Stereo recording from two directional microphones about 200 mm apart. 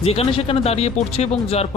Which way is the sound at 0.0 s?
30° left (ahead or behind).